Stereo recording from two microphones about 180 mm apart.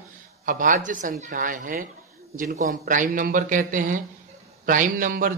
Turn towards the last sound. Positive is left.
turn(degrees=-50)  # may be behind; listen again after turning